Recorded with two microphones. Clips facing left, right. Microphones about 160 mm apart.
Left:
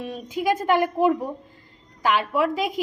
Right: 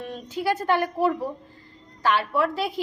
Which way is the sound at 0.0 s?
10° left (ahead or behind).